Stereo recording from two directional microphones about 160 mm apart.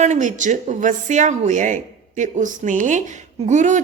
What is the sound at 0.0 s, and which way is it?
Speech, 50° right (ahead or behind).